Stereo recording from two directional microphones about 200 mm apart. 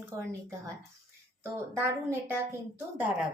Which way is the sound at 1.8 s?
10° right (ahead or behind).